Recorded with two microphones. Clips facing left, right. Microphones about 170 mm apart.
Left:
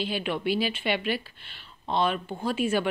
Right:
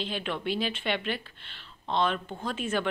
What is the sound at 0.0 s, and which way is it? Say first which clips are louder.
Speech: left 4 dB; 10° left (ahead or behind).